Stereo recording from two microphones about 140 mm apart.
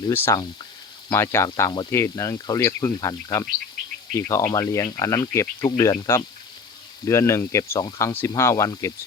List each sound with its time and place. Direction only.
0.1 s speech: 15° left (ahead or behind)